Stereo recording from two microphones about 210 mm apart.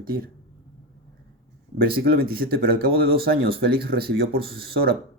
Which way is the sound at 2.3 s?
45° right (ahead or behind).